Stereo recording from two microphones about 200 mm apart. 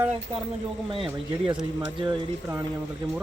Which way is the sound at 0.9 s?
25° right (ahead or behind).